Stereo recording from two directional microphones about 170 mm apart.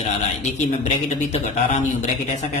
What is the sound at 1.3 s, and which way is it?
A man's voice, 45° left (ahead or behind).